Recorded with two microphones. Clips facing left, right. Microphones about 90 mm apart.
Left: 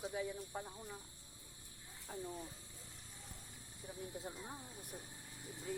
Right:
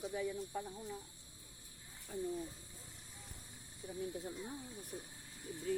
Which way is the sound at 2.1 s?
45° left (ahead or behind).